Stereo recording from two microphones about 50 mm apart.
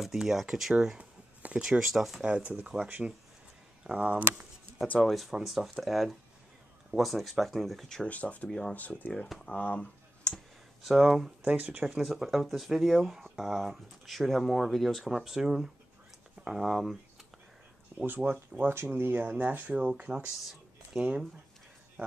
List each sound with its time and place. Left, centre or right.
0.0 s speech: centre
2.2 s speech: right
2.9 s speech: right
5.0 s speech: centre
8.1 s speech: left
8.5 s speech: centre
8.7 s speech: left
10.3 s clicking: centre
10.8 s speech: centre
11.4 s speech: right
11.8 s speech: centre
18.0 s speech: right